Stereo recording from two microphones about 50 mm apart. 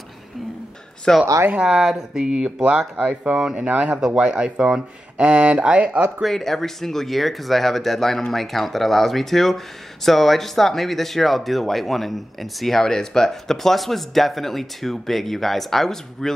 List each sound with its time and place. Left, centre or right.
1.1 s speech: centre
1.5 s speech: centre
6.2 s speech: centre